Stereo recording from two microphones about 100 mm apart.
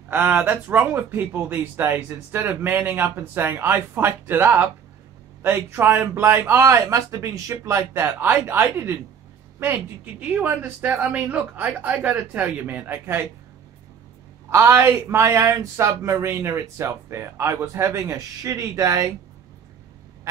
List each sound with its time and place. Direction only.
0.3 s speech: 20° right (ahead or behind)
10.2 s speech: 15° right (ahead or behind)
14.5 s speech: 25° right (ahead or behind)